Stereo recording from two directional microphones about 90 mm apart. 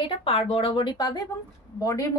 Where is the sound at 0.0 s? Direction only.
90° left; by 1.2 s 55° left (ahead or behind).